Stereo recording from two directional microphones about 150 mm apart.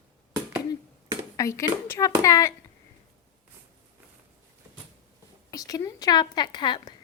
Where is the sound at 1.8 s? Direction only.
20° left (ahead or behind).